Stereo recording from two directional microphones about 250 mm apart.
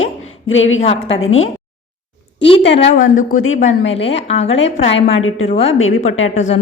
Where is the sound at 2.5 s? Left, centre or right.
Left.